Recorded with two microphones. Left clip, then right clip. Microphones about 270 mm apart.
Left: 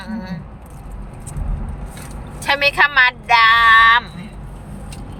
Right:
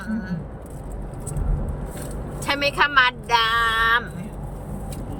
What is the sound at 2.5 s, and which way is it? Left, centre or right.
Speech, left.